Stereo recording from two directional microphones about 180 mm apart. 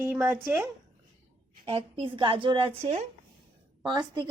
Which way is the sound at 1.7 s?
30° right (ahead or behind).